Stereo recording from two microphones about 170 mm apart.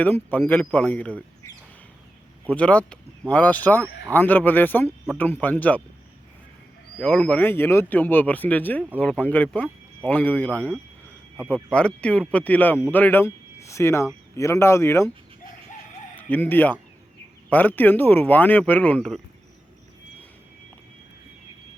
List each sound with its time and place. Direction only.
0.0 s speech: 10° left (ahead or behind)
2.5 s speech: 5° left (ahead or behind)
7.0 s speech: 5° left (ahead or behind)
16.1 s speech: 10° left (ahead or behind)